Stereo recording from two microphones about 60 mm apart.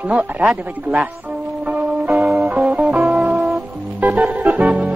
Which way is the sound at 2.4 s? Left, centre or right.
Right.